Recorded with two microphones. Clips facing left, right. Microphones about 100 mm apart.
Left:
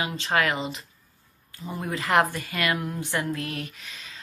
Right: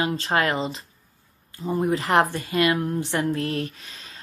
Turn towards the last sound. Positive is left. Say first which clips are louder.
# right 6 dB
turn(degrees=-35)  # may be behind; listen again after turning